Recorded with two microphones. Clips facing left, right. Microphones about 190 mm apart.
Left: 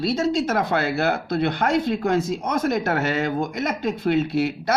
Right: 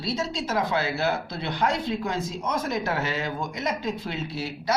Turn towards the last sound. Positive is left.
turn(degrees=55)  # may be behind; listen again after turning